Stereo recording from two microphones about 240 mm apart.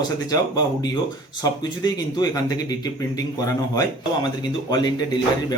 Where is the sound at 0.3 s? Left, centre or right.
Centre.